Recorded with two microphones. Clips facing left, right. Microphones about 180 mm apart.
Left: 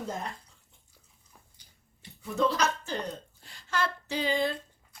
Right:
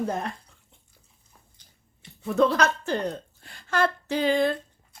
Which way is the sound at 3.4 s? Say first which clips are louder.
Right 7 dB; 55° right (ahead or behind).